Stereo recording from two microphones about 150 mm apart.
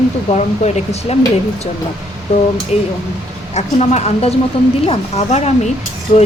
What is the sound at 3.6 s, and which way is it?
Speech, 50° left (ahead or behind).